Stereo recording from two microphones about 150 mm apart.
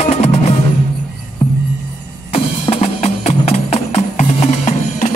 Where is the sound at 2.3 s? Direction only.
40° left (ahead or behind).